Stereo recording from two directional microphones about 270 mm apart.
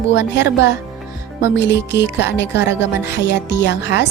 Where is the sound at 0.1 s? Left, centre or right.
Left.